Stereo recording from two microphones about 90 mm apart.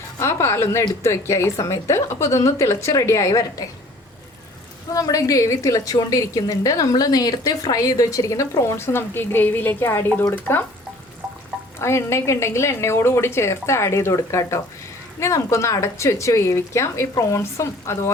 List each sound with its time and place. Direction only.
0.2 s a woman's voice: 35° left (ahead or behind)
4.9 s a woman's voice: 40° left (ahead or behind); by 10.7 s 20° left (ahead or behind)
11.8 s a woman's voice: 30° left (ahead or behind)